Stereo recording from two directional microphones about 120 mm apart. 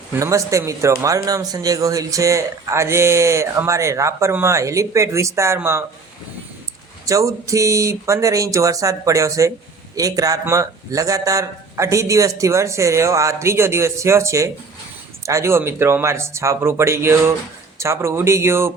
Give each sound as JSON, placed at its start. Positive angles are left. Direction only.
{"t": 0.1, "sound": "speech", "side_deg": -25}
{"t": 7.0, "sound": "speech", "side_deg": -25}